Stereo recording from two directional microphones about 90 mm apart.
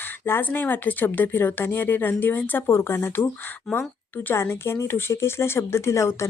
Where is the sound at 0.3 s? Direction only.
20° left (ahead or behind).